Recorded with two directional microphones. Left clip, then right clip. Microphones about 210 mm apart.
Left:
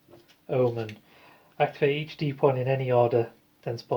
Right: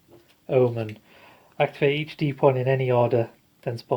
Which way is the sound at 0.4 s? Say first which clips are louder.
Right 4 dB; 50° right (ahead or behind).